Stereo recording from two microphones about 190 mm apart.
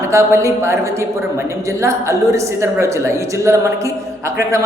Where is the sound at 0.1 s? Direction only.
15° right (ahead or behind).